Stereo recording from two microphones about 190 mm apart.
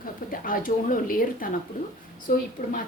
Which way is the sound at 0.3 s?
45° left (ahead or behind).